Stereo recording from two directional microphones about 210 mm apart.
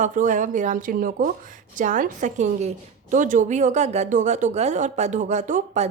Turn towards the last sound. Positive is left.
turn(degrees=-35)  # may be behind; listen again after turning